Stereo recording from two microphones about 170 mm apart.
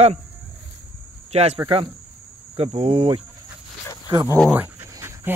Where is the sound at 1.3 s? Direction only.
40° right (ahead or behind).